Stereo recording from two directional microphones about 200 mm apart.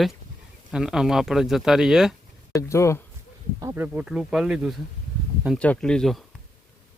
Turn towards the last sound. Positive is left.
turn(degrees=0)  # may be behind; listen again after turning